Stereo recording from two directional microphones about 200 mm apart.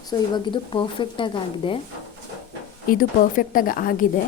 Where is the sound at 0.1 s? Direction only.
20° left (ahead or behind).